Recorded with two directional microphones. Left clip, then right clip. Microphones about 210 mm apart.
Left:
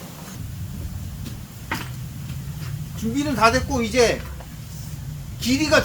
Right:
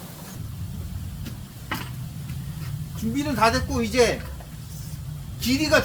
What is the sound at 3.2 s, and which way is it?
Speech, 5° right (ahead or behind).